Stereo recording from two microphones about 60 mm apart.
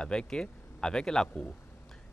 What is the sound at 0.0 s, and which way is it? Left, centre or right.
Speech, centre.